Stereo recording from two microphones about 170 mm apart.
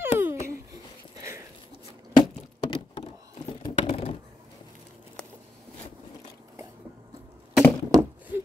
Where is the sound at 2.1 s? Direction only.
25° left (ahead or behind).